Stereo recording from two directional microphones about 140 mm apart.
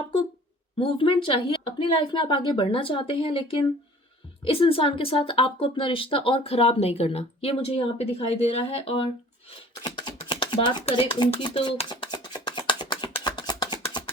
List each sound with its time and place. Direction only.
0.8 s speech: 40° left (ahead or behind)
9.5 s a sound: 40° left (ahead or behind)
10.2 s dishes: 35° left (ahead or behind)